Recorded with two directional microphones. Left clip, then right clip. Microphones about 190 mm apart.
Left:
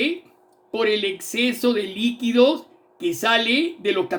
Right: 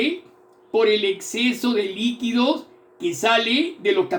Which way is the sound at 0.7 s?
55° left (ahead or behind).